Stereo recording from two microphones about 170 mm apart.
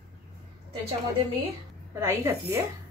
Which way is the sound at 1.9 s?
15° right (ahead or behind).